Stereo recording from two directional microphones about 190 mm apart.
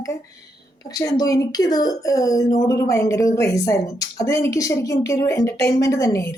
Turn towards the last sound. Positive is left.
turn(degrees=15)  # may be behind; listen again after turning